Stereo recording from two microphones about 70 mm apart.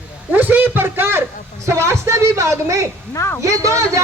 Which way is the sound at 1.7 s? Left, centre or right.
Right.